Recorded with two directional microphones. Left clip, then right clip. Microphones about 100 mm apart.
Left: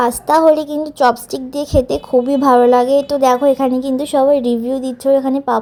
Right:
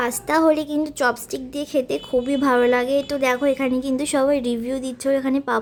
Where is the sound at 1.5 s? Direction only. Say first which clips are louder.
Left 8 dB; 25° left (ahead or behind).